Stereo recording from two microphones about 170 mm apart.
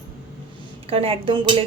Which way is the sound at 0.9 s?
35° right (ahead or behind).